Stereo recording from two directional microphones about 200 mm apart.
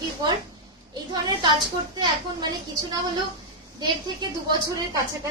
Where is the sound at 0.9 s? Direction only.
20° right (ahead or behind).